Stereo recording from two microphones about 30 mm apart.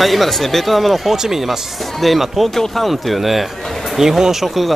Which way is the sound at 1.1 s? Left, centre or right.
Centre.